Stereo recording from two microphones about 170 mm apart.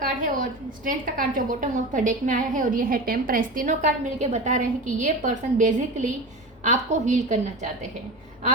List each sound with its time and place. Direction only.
0.0 s a woman's voice: 50° right (ahead or behind)